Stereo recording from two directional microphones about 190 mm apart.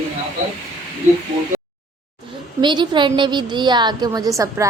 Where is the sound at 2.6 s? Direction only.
25° right (ahead or behind).